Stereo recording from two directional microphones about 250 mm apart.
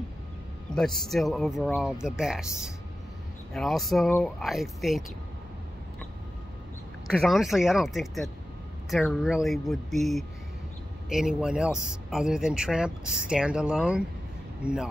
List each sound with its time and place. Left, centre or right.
0.7 s speech: centre
7.1 s speech: centre